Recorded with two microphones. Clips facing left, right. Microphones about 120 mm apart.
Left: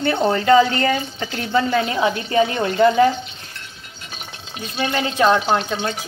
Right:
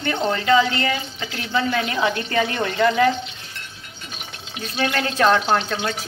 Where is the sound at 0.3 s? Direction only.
40° left (ahead or behind).